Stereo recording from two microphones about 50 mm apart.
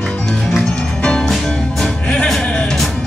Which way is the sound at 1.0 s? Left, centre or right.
Centre.